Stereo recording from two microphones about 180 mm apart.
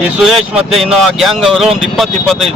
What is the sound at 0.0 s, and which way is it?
A man's voice, centre (ahead or behind).